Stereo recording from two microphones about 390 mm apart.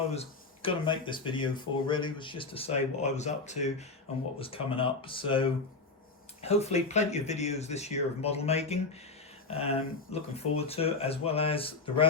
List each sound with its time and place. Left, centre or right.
0.1 s speech: centre